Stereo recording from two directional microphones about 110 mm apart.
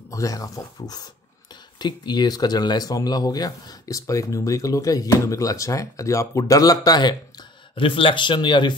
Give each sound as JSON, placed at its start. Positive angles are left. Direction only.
{"t": 0.1, "sound": "speech", "side_deg": 30}